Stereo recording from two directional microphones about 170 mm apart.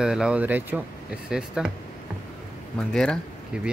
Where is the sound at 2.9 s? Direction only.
5° left (ahead or behind).